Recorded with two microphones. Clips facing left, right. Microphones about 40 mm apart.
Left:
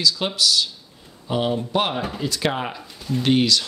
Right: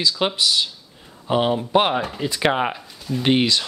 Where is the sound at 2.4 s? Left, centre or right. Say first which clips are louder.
Right 6 dB; right.